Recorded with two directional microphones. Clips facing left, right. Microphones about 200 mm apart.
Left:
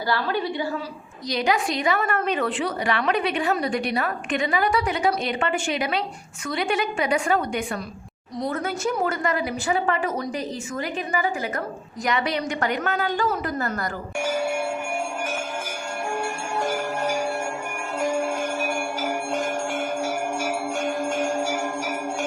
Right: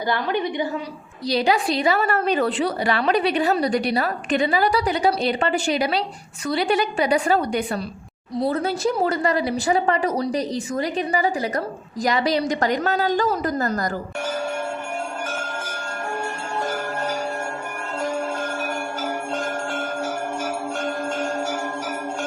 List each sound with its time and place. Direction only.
0.1 s a woman's voice: 20° right (ahead or behind)
1.3 s a woman's voice: 30° right (ahead or behind)
16.6 s music: 10° left (ahead or behind)